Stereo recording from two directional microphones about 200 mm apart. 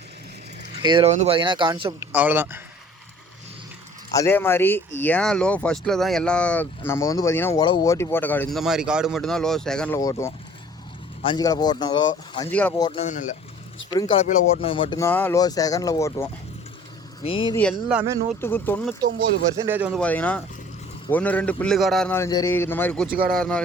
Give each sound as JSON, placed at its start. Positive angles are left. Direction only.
{"t": 0.8, "sound": "speech", "side_deg": -25}
{"t": 2.1, "sound": "speech", "side_deg": -10}
{"t": 4.1, "sound": "speech", "side_deg": 15}
{"t": 10.0, "sound": "speech", "side_deg": 15}
{"t": 12.5, "sound": "speech", "side_deg": 10}
{"t": 13.0, "sound": "speech", "side_deg": 35}
{"t": 13.9, "sound": "speech", "side_deg": 25}
{"t": 14.9, "sound": "speech", "side_deg": 10}
{"t": 17.2, "sound": "speech", "side_deg": 25}
{"t": 17.5, "sound": "speech", "side_deg": 5}
{"t": 18.3, "sound": "speech", "side_deg": 10}
{"t": 19.0, "sound": "speech", "side_deg": -50}
{"t": 19.5, "sound": "speech", "side_deg": -10}
{"t": 19.9, "sound": "speech", "side_deg": 5}